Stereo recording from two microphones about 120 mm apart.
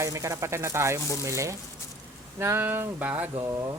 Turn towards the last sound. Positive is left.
turn(degrees=-30)  # may be behind; listen again after turning